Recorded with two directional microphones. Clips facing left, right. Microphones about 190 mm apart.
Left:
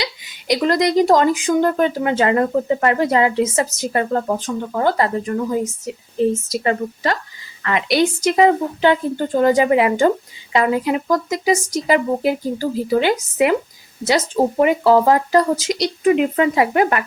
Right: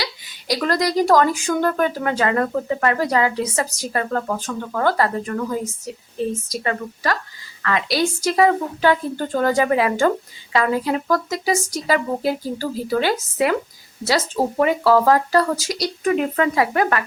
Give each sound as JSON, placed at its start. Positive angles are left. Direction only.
{"t": 0.0, "sound": "speech", "side_deg": 20}